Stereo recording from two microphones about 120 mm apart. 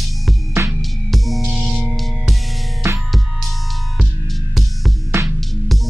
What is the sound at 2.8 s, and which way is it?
Music, 20° right (ahead or behind).